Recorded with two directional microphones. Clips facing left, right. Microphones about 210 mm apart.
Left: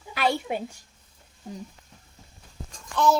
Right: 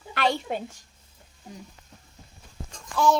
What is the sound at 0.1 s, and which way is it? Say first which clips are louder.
Speech: even; 5° left (ahead or behind).